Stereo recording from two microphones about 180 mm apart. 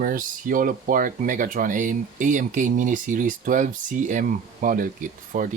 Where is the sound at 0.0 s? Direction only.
50° right (ahead or behind).